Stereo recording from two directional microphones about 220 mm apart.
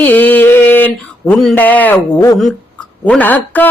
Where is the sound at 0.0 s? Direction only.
10° left (ahead or behind).